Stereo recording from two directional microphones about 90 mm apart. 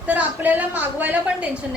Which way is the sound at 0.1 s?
20° right (ahead or behind).